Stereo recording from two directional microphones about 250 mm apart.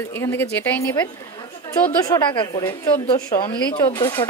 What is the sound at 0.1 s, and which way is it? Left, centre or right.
A woman's voice, centre.